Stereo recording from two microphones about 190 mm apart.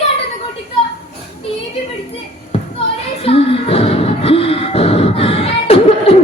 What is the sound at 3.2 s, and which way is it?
Music, 30° left (ahead or behind).